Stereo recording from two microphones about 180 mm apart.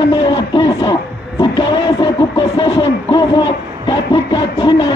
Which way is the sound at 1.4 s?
25° left (ahead or behind).